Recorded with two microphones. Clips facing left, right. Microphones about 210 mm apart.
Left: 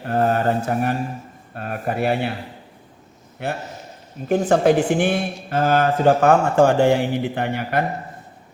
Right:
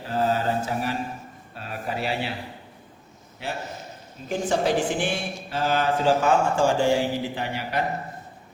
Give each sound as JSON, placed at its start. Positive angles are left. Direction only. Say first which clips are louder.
{"t": 0.0, "sound": "speech", "louder": "left 5 dB", "side_deg": 60}
{"t": 3.4, "sound": "speech", "louder": "left 5 dB", "side_deg": 55}